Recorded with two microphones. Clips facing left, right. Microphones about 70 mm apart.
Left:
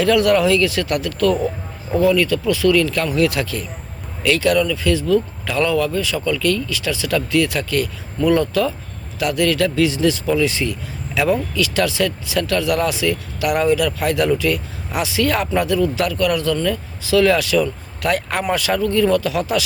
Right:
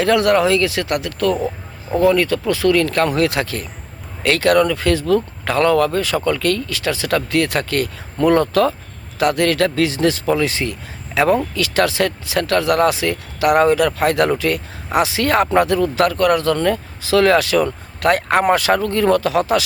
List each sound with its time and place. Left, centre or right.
0.0 s speech: right